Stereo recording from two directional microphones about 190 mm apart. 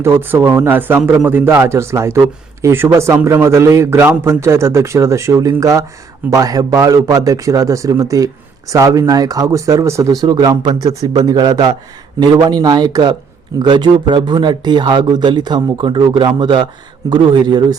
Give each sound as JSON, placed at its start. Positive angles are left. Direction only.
{"t": 0.0, "sound": "a man's voice", "side_deg": -10}